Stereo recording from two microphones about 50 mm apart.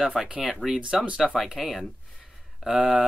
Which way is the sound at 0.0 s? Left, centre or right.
Centre.